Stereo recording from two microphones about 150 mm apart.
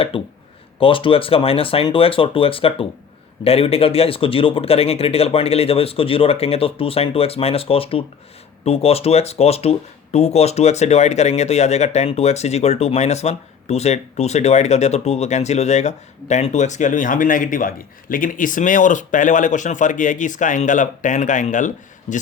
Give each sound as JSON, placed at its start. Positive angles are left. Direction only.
{"t": 0.1, "sound": "speech", "side_deg": 35}